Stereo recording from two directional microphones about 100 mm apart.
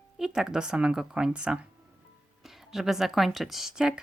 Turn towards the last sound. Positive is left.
turn(degrees=-5)  # may be behind; listen again after turning